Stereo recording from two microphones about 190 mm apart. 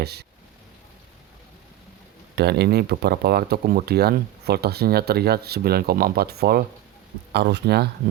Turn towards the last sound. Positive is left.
turn(degrees=-60)  # may be behind; listen again after turning